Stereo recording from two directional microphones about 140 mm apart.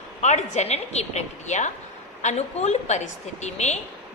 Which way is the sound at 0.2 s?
55° left (ahead or behind).